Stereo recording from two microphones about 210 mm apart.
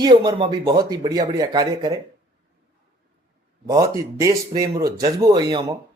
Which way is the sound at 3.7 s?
15° right (ahead or behind).